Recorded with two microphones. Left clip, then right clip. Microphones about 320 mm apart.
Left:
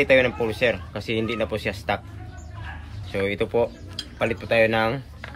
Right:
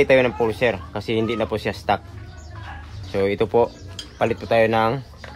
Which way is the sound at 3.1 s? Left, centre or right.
Right.